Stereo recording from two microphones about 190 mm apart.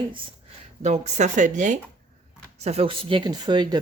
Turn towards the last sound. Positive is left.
turn(degrees=-25)  # may be behind; listen again after turning